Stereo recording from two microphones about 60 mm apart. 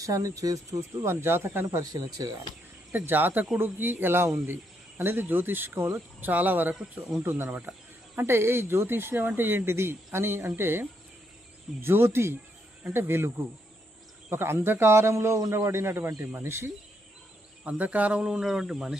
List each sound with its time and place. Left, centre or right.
0.0 s speech: right
1.8 s speech: right
2.9 s speech: right
6.1 s speech: right
17.6 s speech: right
18.2 s speech: centre